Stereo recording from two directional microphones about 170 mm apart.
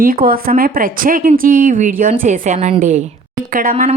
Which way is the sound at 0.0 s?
60° right (ahead or behind).